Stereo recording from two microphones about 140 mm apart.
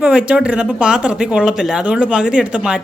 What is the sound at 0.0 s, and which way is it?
Speech, 10° right (ahead or behind).